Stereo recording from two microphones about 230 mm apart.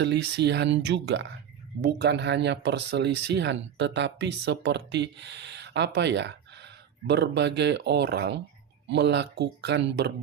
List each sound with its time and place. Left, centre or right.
0.0 s speech: right